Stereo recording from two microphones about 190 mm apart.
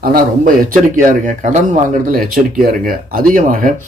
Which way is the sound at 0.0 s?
50° right (ahead or behind).